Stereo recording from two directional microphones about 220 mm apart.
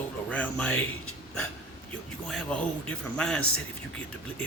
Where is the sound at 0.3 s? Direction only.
5° left (ahead or behind).